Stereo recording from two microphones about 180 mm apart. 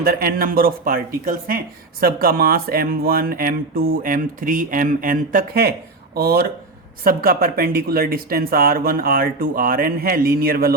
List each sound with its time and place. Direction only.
0.0 s speech: 55° right (ahead or behind)